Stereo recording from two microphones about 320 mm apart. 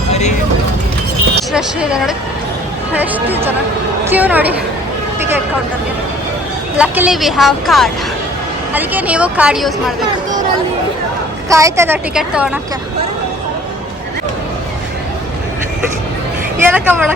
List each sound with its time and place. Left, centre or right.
0.1 s vehicle: left
1.5 s a woman's voice: centre
6.7 s a woman's voice: centre
11.4 s a woman's voice: centre
16.6 s a woman's voice: centre